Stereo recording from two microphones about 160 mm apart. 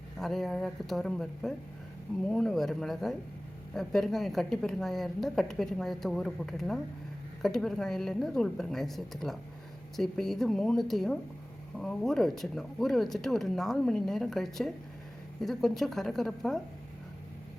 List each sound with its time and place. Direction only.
0.2 s a woman's voice: centre (ahead or behind)